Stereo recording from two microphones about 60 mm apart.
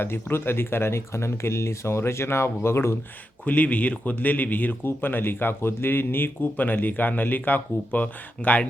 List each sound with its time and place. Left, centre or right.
0.0 s speech: left
3.4 s speech: left